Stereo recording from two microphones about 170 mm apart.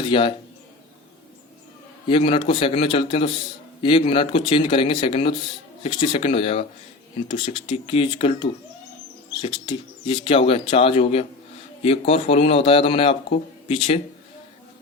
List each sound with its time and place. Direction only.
0.0 s a man's voice: 30° left (ahead or behind)
2.0 s a man's voice: 30° left (ahead or behind)